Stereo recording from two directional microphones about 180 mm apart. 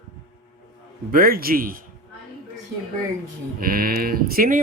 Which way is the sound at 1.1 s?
55° right (ahead or behind).